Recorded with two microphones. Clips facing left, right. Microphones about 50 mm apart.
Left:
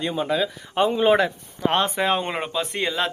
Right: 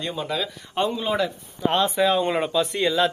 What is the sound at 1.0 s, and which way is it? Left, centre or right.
Speech, left.